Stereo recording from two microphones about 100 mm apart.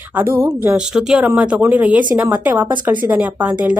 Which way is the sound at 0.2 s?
20° right (ahead or behind).